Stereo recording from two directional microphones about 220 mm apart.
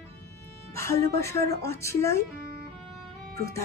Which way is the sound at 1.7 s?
15° left (ahead or behind).